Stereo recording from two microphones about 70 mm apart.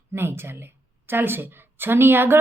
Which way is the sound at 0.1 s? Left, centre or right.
Right.